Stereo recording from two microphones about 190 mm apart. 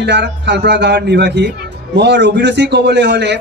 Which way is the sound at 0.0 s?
65° right (ahead or behind).